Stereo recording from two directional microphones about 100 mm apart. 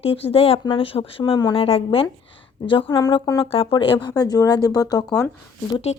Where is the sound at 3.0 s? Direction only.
45° left (ahead or behind).